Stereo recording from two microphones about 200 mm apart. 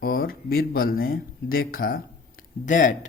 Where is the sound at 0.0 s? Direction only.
50° left (ahead or behind).